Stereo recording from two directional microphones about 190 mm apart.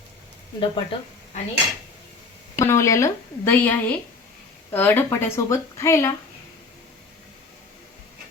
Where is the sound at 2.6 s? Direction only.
15° left (ahead or behind).